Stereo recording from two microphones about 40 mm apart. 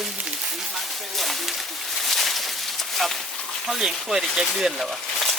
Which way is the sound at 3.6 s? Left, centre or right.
Centre.